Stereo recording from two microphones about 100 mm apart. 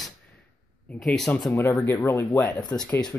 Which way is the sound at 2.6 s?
45° left (ahead or behind).